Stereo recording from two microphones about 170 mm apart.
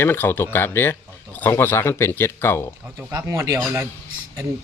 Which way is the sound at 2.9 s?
15° right (ahead or behind).